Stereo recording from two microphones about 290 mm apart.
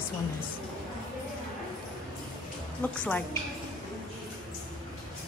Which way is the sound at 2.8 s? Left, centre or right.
Centre.